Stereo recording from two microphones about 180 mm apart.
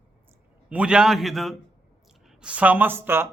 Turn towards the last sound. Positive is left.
turn(degrees=-10)  # may be behind; listen again after turning